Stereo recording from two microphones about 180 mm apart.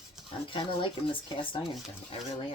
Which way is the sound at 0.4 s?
30° left (ahead or behind).